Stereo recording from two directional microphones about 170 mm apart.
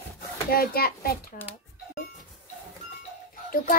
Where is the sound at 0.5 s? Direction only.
65° left (ahead or behind).